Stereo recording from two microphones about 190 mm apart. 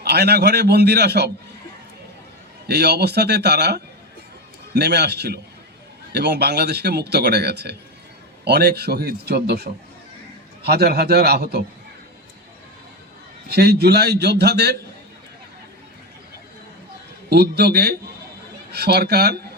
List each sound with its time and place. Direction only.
0.0 s a man's voice: 55° right (ahead or behind)
2.6 s a man's voice: 60° right (ahead or behind)
13.5 s a man's voice: 60° right (ahead or behind)
17.2 s a man's voice: 60° right (ahead or behind)